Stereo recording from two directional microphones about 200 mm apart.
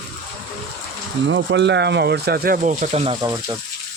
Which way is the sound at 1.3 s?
60° right (ahead or behind).